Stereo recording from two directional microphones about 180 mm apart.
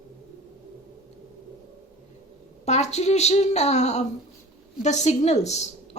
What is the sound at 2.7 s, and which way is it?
Speech, 40° left (ahead or behind).